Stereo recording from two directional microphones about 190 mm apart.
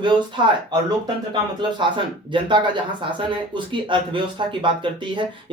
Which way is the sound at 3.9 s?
25° right (ahead or behind).